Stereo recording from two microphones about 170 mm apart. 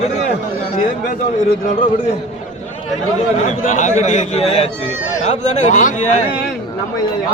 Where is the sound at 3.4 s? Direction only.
45° left (ahead or behind).